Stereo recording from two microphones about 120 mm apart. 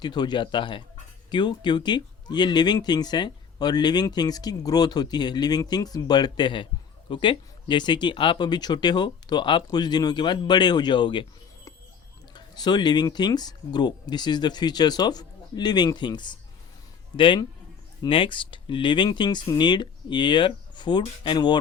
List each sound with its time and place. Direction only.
0.0 s speech: 35° left (ahead or behind)
12.3 s a man's voice: 35° left (ahead or behind)